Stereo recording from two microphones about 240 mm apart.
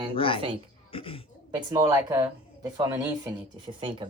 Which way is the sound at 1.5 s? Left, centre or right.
Centre.